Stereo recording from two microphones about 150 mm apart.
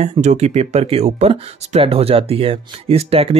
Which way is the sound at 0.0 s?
45° right (ahead or behind).